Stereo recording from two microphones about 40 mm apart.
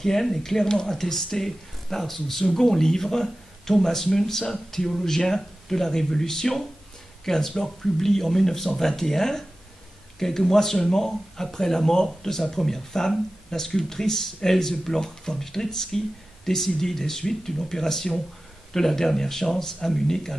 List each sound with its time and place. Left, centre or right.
0.0 s speech: centre